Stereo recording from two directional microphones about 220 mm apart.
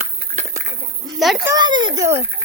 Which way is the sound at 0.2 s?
30° right (ahead or behind).